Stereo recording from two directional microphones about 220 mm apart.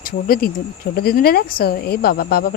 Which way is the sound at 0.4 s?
40° left (ahead or behind).